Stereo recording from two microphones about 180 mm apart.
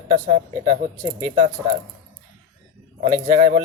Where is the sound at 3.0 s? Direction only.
30° right (ahead or behind).